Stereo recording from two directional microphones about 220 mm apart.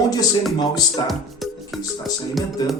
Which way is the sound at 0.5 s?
20° left (ahead or behind).